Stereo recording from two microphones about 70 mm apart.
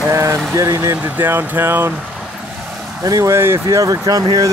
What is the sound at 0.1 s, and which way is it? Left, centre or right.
Speech, right.